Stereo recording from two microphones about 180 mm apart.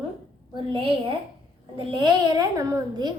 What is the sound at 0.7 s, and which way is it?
A child's voice, 30° right (ahead or behind).